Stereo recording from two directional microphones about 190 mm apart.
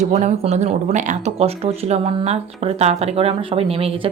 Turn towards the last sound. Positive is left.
turn(degrees=-30)  # may be behind; listen again after turning